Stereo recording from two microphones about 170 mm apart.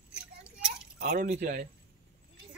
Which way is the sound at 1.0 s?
55° right (ahead or behind).